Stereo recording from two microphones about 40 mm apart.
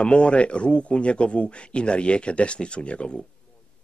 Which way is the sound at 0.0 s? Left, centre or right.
Left.